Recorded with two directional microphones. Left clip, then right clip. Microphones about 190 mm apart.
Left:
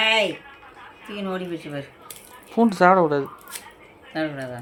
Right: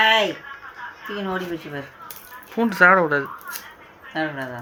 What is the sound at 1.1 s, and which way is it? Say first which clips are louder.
Speech: right 2 dB; 40° left (ahead or behind).